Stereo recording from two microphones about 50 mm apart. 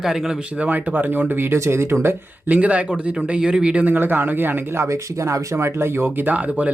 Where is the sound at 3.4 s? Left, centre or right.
Centre.